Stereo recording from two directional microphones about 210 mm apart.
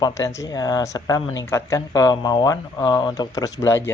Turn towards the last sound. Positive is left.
turn(degrees=15)  # may be behind; listen again after turning